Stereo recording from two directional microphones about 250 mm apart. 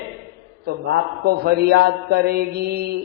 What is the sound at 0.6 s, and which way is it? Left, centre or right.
A man's voice, right.